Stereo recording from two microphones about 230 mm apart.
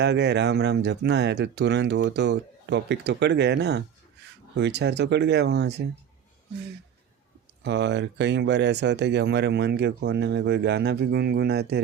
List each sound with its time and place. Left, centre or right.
0.0 s speech: right
7.6 s speech: right